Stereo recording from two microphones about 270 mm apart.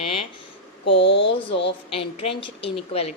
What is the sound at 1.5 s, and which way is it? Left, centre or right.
Speech, left.